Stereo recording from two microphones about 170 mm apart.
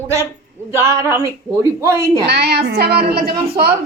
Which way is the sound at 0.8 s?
15° right (ahead or behind).